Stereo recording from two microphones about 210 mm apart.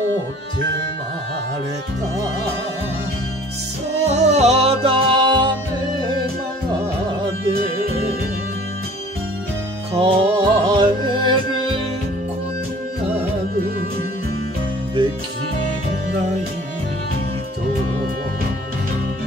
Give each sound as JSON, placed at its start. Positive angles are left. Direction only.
{"t": 4.0, "sound": "music", "side_deg": -30}
{"t": 9.9, "sound": "music", "side_deg": -25}